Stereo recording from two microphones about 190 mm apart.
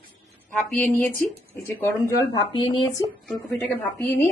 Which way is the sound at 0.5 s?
5° left (ahead or behind).